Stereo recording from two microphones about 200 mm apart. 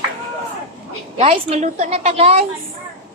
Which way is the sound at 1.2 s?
30° right (ahead or behind).